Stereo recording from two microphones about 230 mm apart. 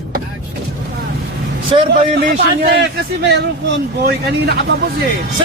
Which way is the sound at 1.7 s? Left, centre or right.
Right.